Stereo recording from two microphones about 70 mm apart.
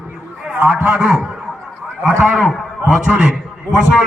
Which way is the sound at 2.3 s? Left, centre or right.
Centre.